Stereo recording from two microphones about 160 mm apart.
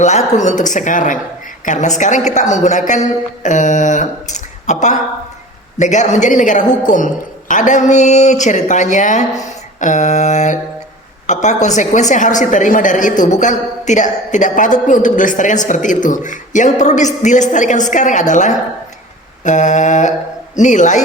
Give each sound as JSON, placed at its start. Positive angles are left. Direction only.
{"t": 0.0, "sound": "a woman's voice", "side_deg": 45}
{"t": 9.4, "sound": "a sound", "side_deg": 50}
{"t": 11.3, "sound": "a woman's voice", "side_deg": 50}